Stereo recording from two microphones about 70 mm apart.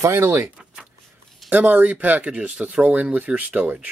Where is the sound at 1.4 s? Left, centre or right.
Right.